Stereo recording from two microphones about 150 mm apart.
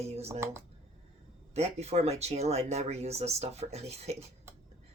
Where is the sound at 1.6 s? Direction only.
45° right (ahead or behind).